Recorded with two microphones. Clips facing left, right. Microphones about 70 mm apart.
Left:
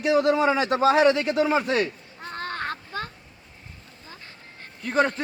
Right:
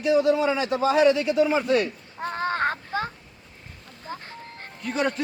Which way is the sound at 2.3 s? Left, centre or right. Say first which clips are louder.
Right 5 dB; centre.